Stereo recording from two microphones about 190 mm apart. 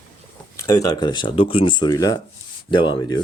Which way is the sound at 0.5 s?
15° left (ahead or behind).